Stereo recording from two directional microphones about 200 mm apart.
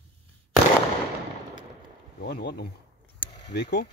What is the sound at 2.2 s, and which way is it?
Speech, 50° left (ahead or behind).